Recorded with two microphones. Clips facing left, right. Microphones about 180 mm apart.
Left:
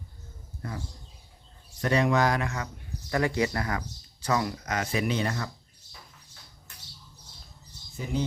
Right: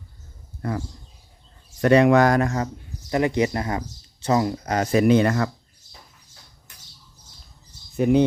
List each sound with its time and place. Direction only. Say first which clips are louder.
1.8 s speech: right 9 dB; 70° right (ahead or behind); by 2.6 s 40° right (ahead or behind)
3.1 s speech: right 5 dB; 20° right (ahead or behind); by 5.5 s 65° right (ahead or behind)
7.9 s speech: right 14 dB; 65° right (ahead or behind)